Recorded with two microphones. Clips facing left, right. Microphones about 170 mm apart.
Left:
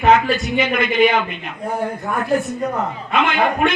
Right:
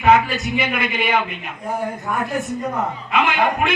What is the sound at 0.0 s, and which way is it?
A man's voice, 10° right (ahead or behind).